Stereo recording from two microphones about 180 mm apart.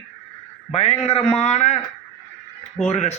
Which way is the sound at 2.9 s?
40° left (ahead or behind).